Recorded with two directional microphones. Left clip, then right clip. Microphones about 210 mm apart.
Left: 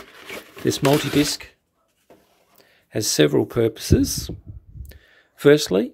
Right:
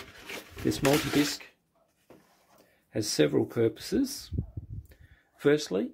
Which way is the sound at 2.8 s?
40° left (ahead or behind).